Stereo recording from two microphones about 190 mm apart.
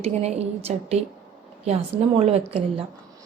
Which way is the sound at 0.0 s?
35° right (ahead or behind).